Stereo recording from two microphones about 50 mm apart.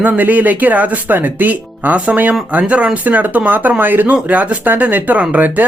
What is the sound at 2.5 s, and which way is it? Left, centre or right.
Speech, right.